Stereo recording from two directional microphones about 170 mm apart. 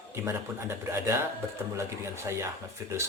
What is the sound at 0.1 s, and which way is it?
Speech, 15° right (ahead or behind).